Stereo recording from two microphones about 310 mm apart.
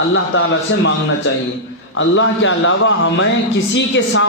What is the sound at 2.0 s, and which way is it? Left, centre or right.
Speech, left.